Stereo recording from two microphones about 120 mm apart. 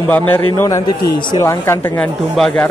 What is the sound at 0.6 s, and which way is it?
A man's voice, 30° left (ahead or behind).